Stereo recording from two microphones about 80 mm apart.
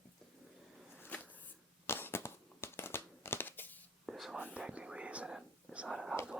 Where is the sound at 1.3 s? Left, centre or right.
Left.